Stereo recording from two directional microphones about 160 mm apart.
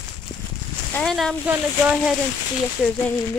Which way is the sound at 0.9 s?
5° left (ahead or behind).